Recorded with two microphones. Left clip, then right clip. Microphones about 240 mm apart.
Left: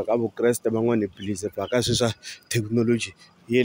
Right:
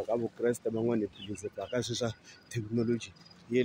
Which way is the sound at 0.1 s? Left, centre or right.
Left.